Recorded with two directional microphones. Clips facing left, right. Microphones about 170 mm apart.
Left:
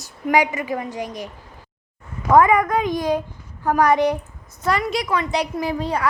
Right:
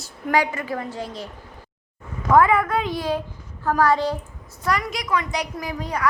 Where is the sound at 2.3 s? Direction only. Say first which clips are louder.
Left 2 dB; 15° left (ahead or behind).